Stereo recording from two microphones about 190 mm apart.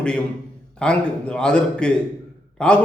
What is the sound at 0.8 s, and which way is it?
A man's voice, 5° left (ahead or behind).